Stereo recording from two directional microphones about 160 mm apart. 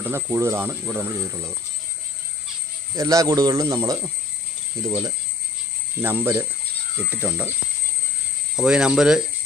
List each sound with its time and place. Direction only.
0.0 s speech: 15° right (ahead or behind)
2.9 s speech: 20° right (ahead or behind)
5.9 s speech: 15° right (ahead or behind)
8.5 s cricket: 5° right (ahead or behind)